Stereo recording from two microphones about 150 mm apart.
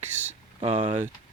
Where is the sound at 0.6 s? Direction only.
45° right (ahead or behind).